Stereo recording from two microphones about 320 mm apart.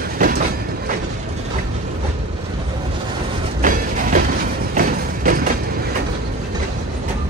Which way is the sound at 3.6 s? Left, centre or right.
Right.